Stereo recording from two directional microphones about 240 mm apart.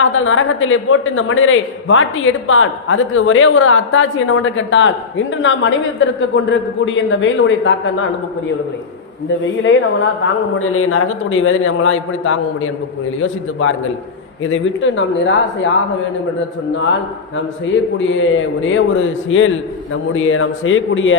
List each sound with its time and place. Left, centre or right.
0.0 s a man's voice: left
9.4 s a man's voice: left
16.7 s a man's voice: left